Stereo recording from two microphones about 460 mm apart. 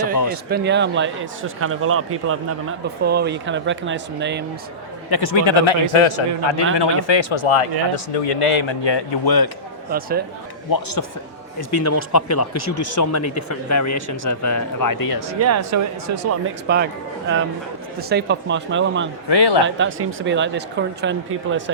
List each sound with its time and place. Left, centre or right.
0.5 s speech: right
5.1 s a man's voice: left
6.7 s speech: left
9.9 s speech: centre
10.7 s a man's voice: left
11.7 s speech: left
15.4 s speech: right
16.6 s speech: right
19.3 s speech: left
19.6 s speech: right